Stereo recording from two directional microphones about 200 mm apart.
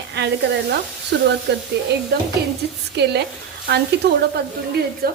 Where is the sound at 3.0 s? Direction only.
55° right (ahead or behind).